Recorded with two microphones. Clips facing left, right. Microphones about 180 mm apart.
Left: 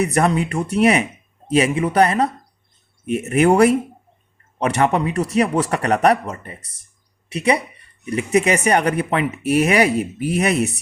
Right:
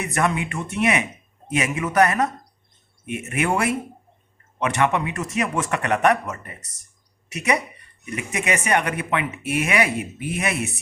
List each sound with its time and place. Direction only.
0.0 s speech: 35° left (ahead or behind)